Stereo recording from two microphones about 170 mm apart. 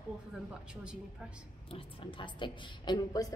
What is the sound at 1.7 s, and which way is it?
A woman's voice, 30° left (ahead or behind).